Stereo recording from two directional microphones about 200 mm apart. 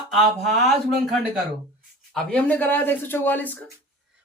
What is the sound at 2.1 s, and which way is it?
Speech, 5° left (ahead or behind).